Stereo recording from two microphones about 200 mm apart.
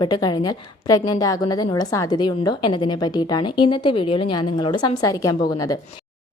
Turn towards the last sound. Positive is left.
turn(degrees=15)  # may be behind; listen again after turning